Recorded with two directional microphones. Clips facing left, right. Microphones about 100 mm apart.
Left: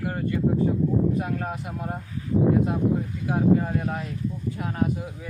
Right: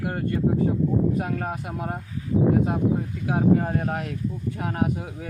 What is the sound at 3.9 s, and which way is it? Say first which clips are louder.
Speech: right 2 dB; 75° right (ahead or behind).